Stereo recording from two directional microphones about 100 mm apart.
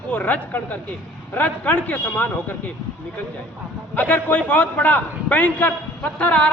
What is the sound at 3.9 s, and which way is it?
A man's voice, 15° left (ahead or behind).